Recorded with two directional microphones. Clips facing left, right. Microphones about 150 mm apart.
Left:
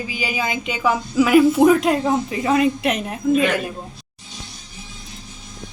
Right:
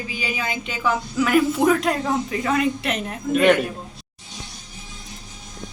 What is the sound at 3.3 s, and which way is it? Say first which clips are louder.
Speech: right 1 dB; 70° right (ahead or behind).